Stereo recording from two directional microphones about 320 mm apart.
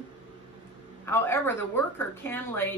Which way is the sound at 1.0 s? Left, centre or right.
Centre.